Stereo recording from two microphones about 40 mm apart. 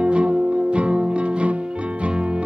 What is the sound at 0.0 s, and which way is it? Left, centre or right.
Music, right.